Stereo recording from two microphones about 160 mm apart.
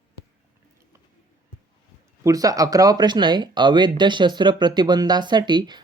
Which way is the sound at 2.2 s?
20° right (ahead or behind).